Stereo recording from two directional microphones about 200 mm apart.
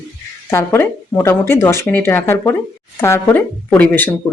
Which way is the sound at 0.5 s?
10° left (ahead or behind).